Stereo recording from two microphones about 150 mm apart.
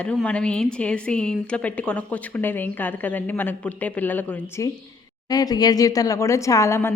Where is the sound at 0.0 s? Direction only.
10° left (ahead or behind).